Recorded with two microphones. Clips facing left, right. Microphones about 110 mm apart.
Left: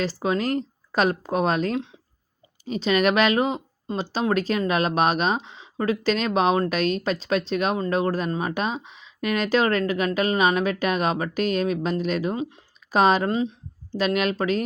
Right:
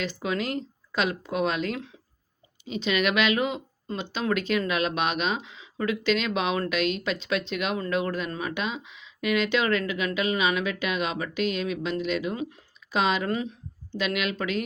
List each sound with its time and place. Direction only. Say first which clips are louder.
0.0 s speech: left 5 dB; 35° left (ahead or behind)
12.4 s speech: left 3 dB; 25° left (ahead or behind)
12.9 s speech: left 6 dB; 40° left (ahead or behind)
13.2 s speech: left 5 dB; 25° left (ahead or behind)
13.9 s speech: left 5 dB; 35° left (ahead or behind)